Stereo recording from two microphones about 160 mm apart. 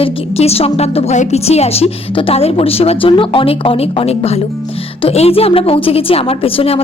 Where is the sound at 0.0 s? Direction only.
40° left (ahead or behind).